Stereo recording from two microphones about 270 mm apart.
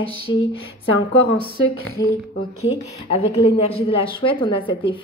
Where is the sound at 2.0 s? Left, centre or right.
Left.